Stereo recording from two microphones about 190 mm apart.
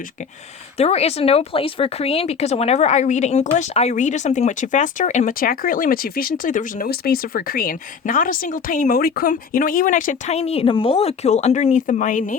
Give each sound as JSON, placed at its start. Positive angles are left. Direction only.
{"t": 0.8, "sound": "speech", "side_deg": 35}